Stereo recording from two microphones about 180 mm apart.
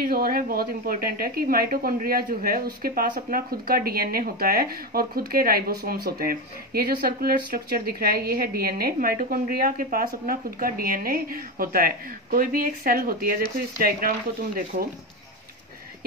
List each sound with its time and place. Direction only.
0.0 s a woman's voice: 55° right (ahead or behind)